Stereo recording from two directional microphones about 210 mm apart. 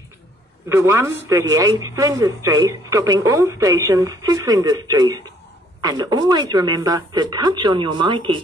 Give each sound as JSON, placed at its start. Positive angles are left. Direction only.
{"t": 0.7, "sound": "a woman's voice", "side_deg": -10}